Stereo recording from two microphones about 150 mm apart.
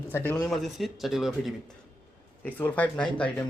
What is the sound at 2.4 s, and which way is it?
Speech, 10° left (ahead or behind).